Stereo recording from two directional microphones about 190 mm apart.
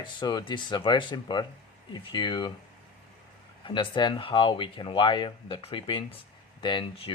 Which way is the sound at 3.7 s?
25° left (ahead or behind).